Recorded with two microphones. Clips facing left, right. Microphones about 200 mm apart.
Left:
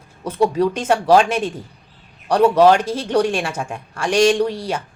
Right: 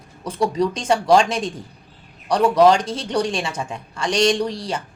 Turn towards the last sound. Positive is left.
turn(degrees=10)  # may be behind; listen again after turning